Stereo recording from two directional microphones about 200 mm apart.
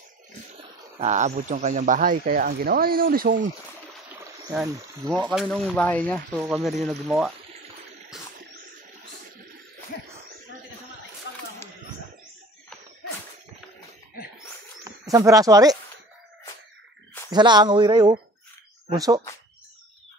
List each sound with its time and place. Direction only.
0.9 s speech: 35° right (ahead or behind)
4.6 s speech: 15° right (ahead or behind)
5.2 s speech: centre (ahead or behind)
6.4 s speech: centre (ahead or behind)
14.9 s speech: 15° right (ahead or behind)
17.3 s speech: 20° right (ahead or behind)